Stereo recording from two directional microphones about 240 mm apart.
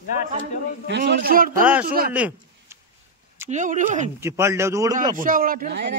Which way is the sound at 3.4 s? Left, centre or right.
Right.